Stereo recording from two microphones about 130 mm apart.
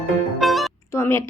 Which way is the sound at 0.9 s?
20° left (ahead or behind).